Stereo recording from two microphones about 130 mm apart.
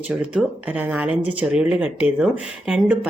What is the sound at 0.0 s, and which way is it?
Speech, 10° right (ahead or behind).